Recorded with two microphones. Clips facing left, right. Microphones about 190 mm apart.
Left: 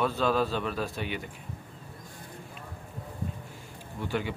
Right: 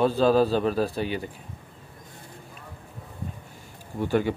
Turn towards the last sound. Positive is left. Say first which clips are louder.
# right 8 dB
turn(degrees=-45)  # may be behind; listen again after turning